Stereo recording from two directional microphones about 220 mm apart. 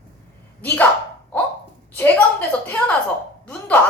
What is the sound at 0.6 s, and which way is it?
Speech, 10° left (ahead or behind).